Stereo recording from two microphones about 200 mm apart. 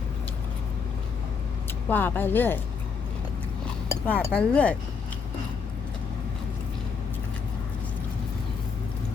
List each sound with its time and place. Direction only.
1.9 s speech: 10° left (ahead or behind)
4.0 s speech: 10° left (ahead or behind)